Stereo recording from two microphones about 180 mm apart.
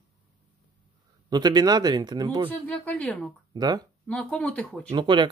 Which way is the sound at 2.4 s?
10° left (ahead or behind).